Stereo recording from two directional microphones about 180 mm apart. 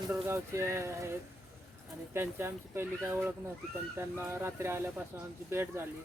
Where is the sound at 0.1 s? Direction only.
15° right (ahead or behind).